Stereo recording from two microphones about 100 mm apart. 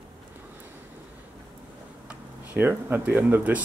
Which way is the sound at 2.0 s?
20° right (ahead or behind).